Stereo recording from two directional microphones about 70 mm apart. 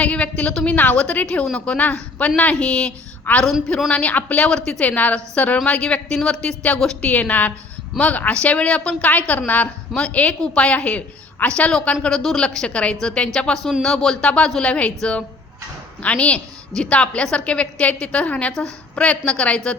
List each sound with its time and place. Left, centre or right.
0.0 s a sound: centre
0.5 s a woman's voice: centre
3.3 s a woman's voice: left
3.8 s a woman's voice: centre